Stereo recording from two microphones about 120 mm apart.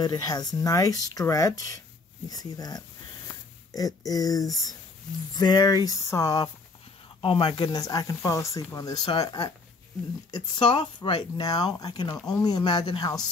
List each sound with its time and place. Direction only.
0.0 s speech: 35° left (ahead or behind)
7.2 s a woman's voice: 45° left (ahead or behind)